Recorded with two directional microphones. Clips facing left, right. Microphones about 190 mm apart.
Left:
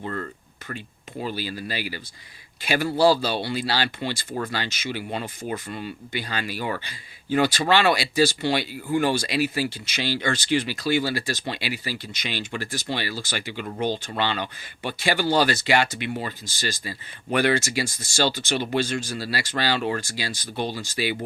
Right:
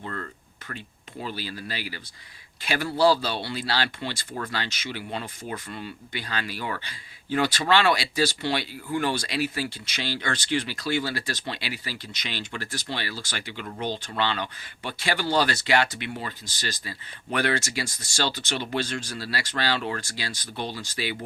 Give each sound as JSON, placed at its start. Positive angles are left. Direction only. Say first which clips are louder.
{"t": 0.0, "sound": "a sound", "louder": "left 4 dB", "side_deg": 20}
{"t": 1.2, "sound": "speech", "louder": "left 4 dB", "side_deg": 5}
{"t": 17.3, "sound": "speech", "louder": "left 4 dB", "side_deg": 10}